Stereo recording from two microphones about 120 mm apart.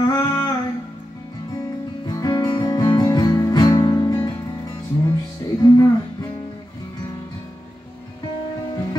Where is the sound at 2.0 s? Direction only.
35° left (ahead or behind).